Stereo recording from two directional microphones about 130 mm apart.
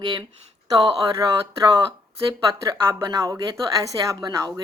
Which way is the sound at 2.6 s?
30° right (ahead or behind).